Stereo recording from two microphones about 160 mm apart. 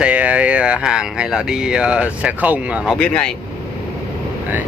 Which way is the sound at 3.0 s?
5° left (ahead or behind).